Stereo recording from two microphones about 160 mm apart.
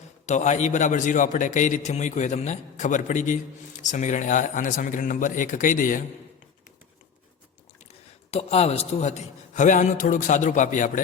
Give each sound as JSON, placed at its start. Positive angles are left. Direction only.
{"t": 0.3, "sound": "a man's voice", "side_deg": 45}
{"t": 7.9, "sound": "a man's voice", "side_deg": 40}